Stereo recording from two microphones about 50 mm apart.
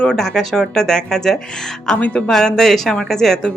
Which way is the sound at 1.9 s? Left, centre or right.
Left.